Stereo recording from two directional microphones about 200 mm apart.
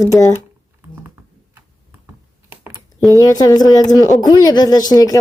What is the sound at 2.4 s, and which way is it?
Typing, 10° right (ahead or behind).